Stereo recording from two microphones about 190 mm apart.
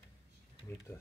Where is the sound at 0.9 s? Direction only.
20° left (ahead or behind).